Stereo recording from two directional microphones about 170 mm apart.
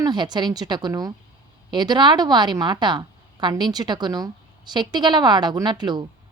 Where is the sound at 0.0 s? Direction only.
25° right (ahead or behind).